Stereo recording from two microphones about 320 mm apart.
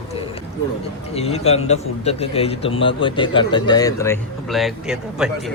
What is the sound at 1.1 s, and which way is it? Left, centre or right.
A man's voice, centre.